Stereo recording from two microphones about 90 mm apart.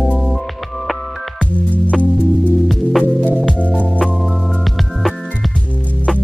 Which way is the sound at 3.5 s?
15° left (ahead or behind).